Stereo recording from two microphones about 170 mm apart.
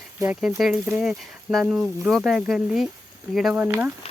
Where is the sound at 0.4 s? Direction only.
Centre (ahead or behind).